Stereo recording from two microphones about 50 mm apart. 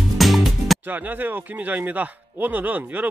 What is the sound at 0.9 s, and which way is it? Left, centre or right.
A man's voice, right.